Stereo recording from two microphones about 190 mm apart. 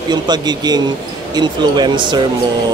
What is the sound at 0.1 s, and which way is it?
Speech, 20° right (ahead or behind).